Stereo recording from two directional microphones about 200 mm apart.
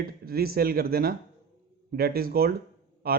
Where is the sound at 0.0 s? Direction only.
50° right (ahead or behind).